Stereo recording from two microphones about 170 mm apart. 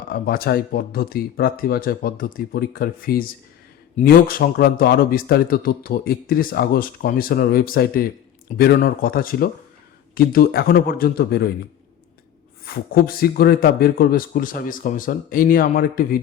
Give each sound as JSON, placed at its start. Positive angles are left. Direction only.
{"t": 0.1, "sound": "a man's voice", "side_deg": 60}
{"t": 12.6, "sound": "a man's voice", "side_deg": 60}